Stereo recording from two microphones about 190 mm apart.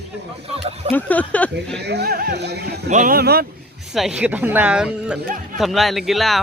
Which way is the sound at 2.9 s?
45° right (ahead or behind).